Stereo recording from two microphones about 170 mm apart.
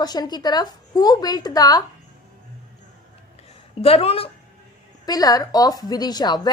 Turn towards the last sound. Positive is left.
turn(degrees=25)  # may be behind; listen again after turning